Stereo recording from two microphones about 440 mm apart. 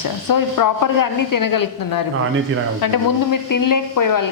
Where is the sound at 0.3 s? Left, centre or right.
Left.